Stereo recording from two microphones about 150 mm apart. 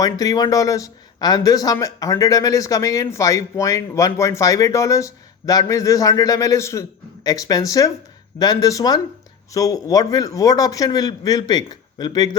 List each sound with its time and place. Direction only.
0.0 s speech: 25° left (ahead or behind)